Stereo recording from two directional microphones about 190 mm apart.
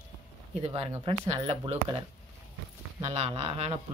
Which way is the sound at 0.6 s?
30° right (ahead or behind).